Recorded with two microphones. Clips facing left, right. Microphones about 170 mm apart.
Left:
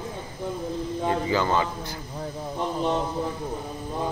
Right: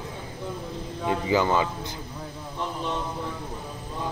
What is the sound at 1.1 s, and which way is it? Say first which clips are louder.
Speech: right 2 dB; 15° right (ahead or behind).